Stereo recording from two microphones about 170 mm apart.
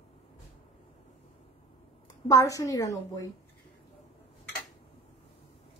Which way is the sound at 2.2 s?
20° left (ahead or behind).